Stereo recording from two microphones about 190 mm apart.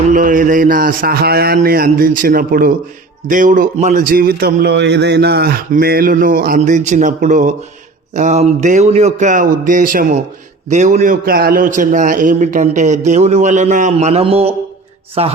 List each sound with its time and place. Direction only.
0.1 s a man's voice: 45° right (ahead or behind)
4.0 s a man's voice: 50° right (ahead or behind); by 15.3 s 35° right (ahead or behind)